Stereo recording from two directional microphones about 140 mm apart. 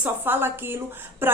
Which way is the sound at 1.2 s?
15° right (ahead or behind).